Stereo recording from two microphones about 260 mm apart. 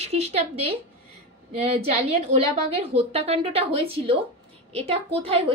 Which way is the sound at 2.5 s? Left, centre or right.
Right.